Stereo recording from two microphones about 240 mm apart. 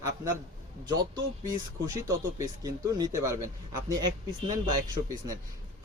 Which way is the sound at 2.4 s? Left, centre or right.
Centre.